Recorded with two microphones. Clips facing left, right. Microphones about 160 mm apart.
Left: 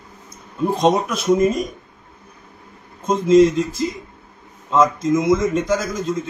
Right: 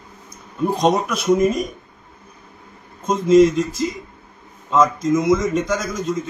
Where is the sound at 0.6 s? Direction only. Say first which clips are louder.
Left 1 dB; centre (ahead or behind).